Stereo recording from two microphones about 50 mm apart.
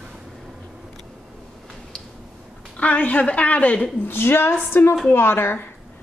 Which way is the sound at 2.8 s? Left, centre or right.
Left.